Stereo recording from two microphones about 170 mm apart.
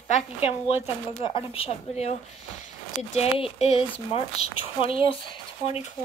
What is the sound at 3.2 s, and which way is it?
Speech, 35° left (ahead or behind).